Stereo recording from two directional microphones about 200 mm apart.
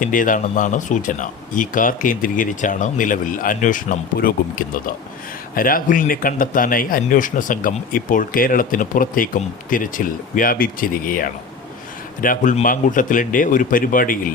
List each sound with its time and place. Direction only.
0.0 s speech: 40° left (ahead or behind)